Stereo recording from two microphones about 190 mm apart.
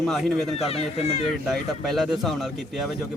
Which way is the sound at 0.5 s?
30° left (ahead or behind).